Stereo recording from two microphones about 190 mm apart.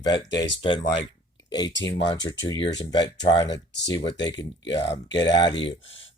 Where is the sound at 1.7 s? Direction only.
70° left (ahead or behind).